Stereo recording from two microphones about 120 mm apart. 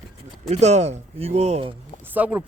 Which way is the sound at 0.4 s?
65° right (ahead or behind).